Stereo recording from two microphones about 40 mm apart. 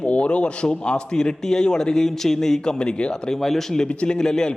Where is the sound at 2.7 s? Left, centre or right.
Left.